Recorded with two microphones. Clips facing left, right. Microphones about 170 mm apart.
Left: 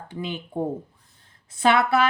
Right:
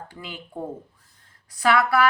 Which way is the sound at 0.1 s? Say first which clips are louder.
Left 7 dB; 20° left (ahead or behind).